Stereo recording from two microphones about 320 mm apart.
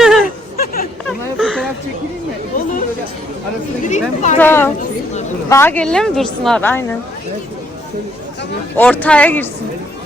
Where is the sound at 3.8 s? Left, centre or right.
Left.